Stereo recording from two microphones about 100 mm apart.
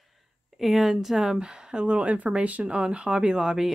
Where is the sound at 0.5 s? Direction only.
Centre (ahead or behind).